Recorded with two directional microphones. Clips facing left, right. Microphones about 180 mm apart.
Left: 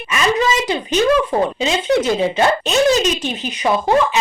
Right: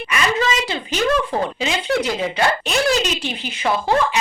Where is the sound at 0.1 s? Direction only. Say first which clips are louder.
Left 4 dB; 20° left (ahead or behind).